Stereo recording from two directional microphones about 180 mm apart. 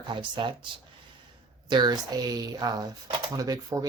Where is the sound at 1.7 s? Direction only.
25° right (ahead or behind).